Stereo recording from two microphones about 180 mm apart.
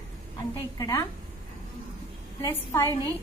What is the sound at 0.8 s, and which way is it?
Speech, 20° left (ahead or behind).